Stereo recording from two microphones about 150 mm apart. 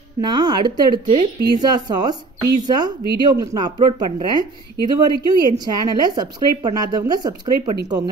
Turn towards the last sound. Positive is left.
turn(degrees=-25)  # may be behind; listen again after turning